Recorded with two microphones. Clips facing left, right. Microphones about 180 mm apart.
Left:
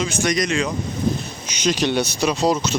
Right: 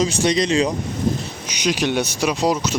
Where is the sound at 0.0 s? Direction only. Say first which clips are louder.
Right 3 dB; 30° right (ahead or behind).